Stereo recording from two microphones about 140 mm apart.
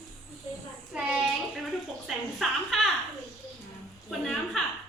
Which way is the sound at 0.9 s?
5° right (ahead or behind).